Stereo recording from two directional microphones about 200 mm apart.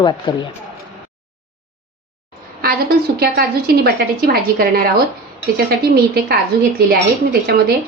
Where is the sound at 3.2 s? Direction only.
50° right (ahead or behind).